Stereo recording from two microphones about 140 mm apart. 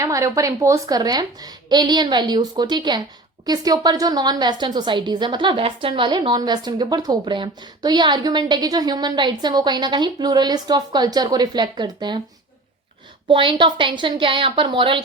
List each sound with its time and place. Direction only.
0.0 s a woman's voice: 25° right (ahead or behind)
13.2 s a woman's voice: 35° right (ahead or behind)